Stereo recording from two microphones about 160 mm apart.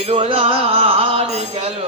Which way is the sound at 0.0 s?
35° right (ahead or behind).